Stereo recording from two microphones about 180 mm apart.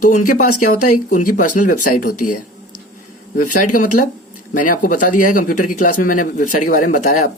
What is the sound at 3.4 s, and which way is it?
Speech, 45° left (ahead or behind).